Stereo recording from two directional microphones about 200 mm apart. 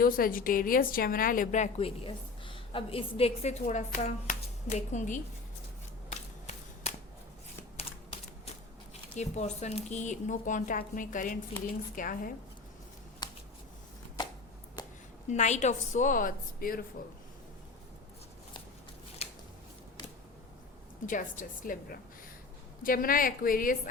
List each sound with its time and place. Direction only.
0.0 s a woman's voice: 45° left (ahead or behind)
6.1 s a sound: 35° left (ahead or behind)
9.1 s a woman's voice: 35° left (ahead or behind)
13.2 s shuffling cards: 20° left (ahead or behind)
15.3 s a woman's voice: 35° left (ahead or behind)
19.2 s scissors: 30° left (ahead or behind)
21.1 s a woman's voice: 40° left (ahead or behind)